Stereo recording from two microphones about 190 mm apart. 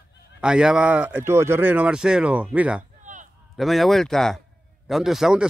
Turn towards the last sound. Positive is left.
turn(degrees=0)  # may be behind; listen again after turning